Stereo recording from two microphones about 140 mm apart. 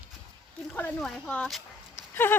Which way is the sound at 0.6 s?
10° left (ahead or behind).